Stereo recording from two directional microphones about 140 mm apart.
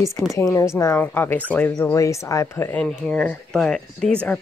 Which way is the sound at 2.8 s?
5° left (ahead or behind).